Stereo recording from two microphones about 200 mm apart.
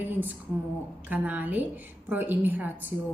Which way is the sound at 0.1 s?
10° right (ahead or behind).